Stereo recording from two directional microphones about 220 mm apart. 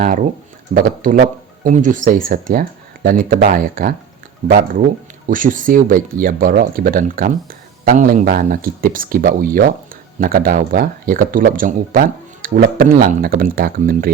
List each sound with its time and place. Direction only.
0.7 s speech: 40° right (ahead or behind)